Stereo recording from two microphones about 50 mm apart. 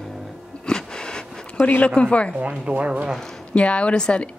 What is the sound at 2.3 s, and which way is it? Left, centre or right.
Speech, right.